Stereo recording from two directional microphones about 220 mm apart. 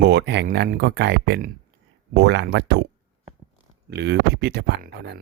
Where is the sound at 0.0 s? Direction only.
50° right (ahead or behind).